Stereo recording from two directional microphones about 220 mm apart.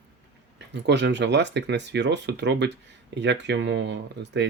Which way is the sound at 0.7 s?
50° right (ahead or behind).